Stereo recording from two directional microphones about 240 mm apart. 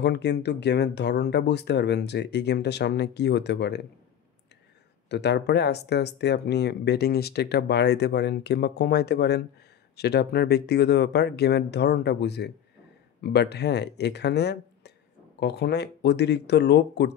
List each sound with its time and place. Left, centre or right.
0.0 s speech: left
5.1 s speech: left